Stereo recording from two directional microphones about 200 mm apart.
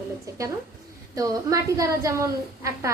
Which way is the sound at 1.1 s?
15° right (ahead or behind).